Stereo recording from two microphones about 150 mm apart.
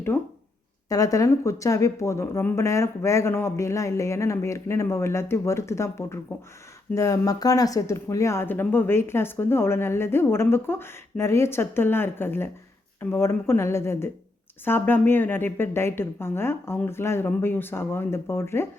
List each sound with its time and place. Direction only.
0.1 s speech: 15° left (ahead or behind)